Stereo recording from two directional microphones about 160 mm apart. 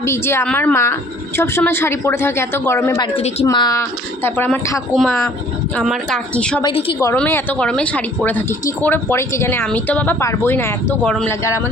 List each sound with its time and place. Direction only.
0.0 s speech: 15° left (ahead or behind)
3.2 s a woman's voice: 40° left (ahead or behind)
3.4 s speech: 25° left (ahead or behind)
4.9 s a woman's voice: centre (ahead or behind)
6.6 s a woman's voice: 30° left (ahead or behind)
7.2 s speech: 10° left (ahead or behind)
11.3 s speech: 15° left (ahead or behind)